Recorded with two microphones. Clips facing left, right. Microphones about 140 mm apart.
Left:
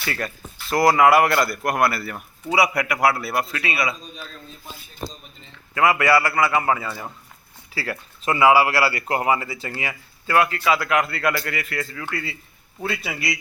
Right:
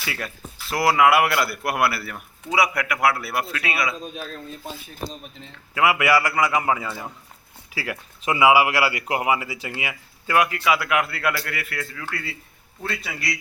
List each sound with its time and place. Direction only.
0.0 s a man's voice: 5° right (ahead or behind)
4.0 s a man's voice: 55° right (ahead or behind)
5.7 s a man's voice: 10° right (ahead or behind); by 13.3 s 5° left (ahead or behind)